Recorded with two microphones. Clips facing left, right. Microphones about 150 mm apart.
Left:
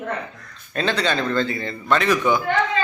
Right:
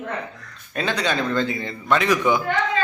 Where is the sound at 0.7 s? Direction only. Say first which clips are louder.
Left 1 dB; 10° right (ahead or behind).